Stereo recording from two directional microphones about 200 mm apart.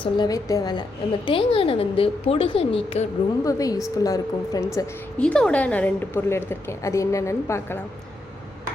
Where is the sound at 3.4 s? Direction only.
15° left (ahead or behind).